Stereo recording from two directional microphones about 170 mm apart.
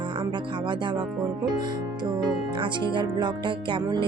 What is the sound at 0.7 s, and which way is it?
Speech, 30° right (ahead or behind).